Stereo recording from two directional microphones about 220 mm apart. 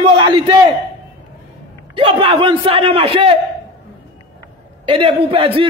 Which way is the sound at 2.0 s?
25° right (ahead or behind).